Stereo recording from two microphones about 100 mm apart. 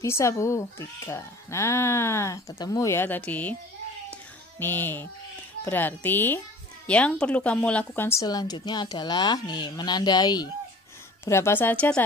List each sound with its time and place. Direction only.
0.0 s speech: 30° left (ahead or behind)
2.6 s speech: 40° left (ahead or behind)
2.9 s speech: 20° left (ahead or behind)
4.1 s a sound: 20° left (ahead or behind)
5.7 s speech: 20° left (ahead or behind)
8.2 s a woman's voice: 40° left (ahead or behind)
11.2 s speech: 25° left (ahead or behind)